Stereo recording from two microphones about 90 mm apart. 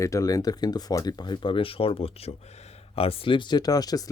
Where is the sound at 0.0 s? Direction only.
35° left (ahead or behind).